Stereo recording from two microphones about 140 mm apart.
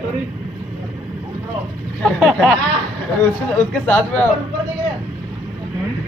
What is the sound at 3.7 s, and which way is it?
Speech, 10° left (ahead or behind).